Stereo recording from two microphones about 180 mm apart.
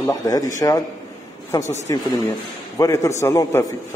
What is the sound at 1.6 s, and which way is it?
Speech, 40° left (ahead or behind).